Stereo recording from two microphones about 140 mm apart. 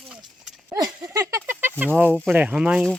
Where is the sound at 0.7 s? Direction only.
25° right (ahead or behind).